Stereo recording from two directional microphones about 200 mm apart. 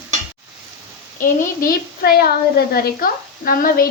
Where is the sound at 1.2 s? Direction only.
45° left (ahead or behind).